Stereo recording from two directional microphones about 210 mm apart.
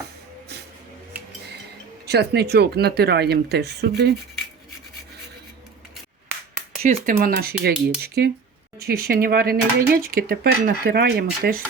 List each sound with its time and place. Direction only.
2.0 s speech: 50° right (ahead or behind)
7.0 s speech: 40° right (ahead or behind)